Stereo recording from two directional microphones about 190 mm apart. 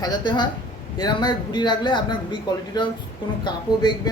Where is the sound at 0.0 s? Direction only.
25° left (ahead or behind).